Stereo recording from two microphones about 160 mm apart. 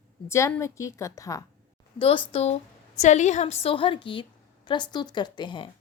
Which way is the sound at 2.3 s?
35° left (ahead or behind).